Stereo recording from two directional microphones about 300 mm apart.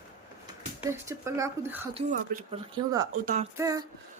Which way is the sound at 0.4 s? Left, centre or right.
Centre.